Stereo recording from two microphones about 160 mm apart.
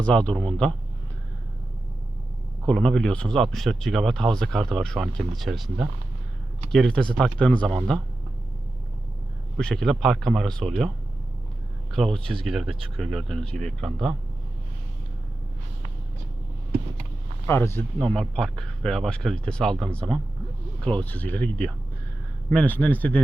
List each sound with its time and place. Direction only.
0.0 s speech: 5° left (ahead or behind)
2.6 s speech: 5° left (ahead or behind)
9.6 s speech: 5° left (ahead or behind)
17.4 s speech: 15° left (ahead or behind)
18.0 s speech: 5° left (ahead or behind)